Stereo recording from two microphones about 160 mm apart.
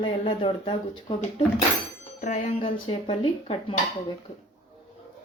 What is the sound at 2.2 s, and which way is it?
Speech, 45° left (ahead or behind).